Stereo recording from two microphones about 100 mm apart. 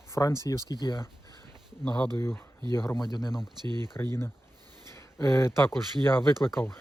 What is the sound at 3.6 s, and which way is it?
Speech, 50° right (ahead or behind).